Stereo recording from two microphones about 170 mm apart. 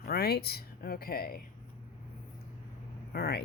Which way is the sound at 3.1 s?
65° left (ahead or behind).